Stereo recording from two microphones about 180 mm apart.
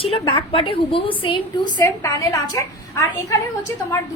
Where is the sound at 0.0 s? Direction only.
30° left (ahead or behind).